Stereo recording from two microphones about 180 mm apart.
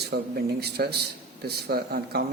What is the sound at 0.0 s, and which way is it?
Speech, 65° right (ahead or behind).